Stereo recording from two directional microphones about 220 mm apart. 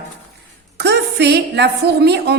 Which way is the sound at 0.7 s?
50° right (ahead or behind).